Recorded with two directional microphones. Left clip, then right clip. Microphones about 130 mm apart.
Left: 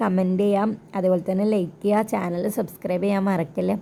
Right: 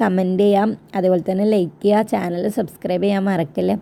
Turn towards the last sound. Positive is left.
turn(degrees=-15)  # may be behind; listen again after turning